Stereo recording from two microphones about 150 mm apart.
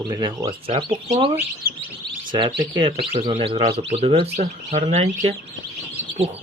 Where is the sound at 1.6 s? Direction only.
75° right (ahead or behind).